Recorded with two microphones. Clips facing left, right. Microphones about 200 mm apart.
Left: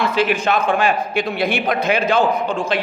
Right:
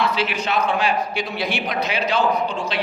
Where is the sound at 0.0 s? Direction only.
50° left (ahead or behind).